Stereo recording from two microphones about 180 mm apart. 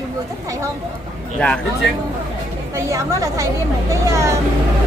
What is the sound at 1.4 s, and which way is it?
Speech, 5° left (ahead or behind).